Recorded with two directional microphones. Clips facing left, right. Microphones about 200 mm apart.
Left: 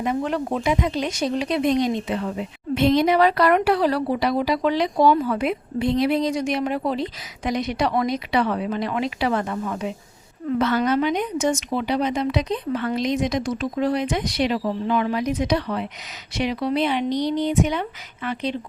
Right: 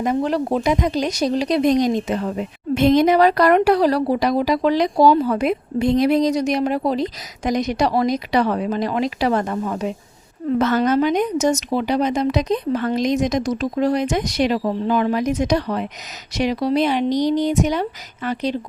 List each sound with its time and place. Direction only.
0.0 s a woman's voice: 40° right (ahead or behind)